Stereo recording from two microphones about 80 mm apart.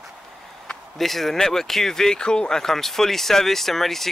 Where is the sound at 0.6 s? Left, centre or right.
Centre.